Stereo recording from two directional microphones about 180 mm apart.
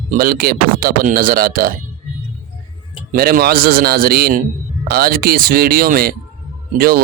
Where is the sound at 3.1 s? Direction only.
55° right (ahead or behind).